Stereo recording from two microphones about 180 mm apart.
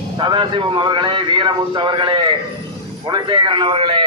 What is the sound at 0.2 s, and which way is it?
A man's voice, 25° right (ahead or behind).